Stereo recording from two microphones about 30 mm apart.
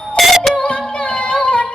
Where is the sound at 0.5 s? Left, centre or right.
Left.